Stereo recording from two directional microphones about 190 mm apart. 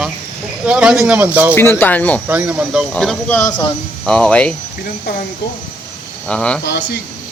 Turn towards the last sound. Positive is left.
turn(degrees=65)  # may be behind; listen again after turning